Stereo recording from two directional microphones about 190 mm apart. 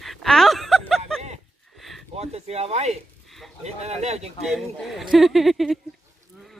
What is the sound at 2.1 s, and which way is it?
Speech, 35° right (ahead or behind).